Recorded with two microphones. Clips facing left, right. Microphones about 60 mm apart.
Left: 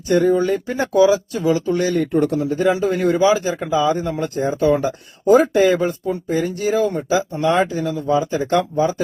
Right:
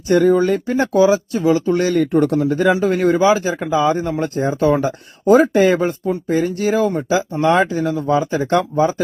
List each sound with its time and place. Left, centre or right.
0.1 s speech: right
0.9 s a man's voice: right
2.2 s speech: right
2.8 s a man's voice: right
4.2 s speech: right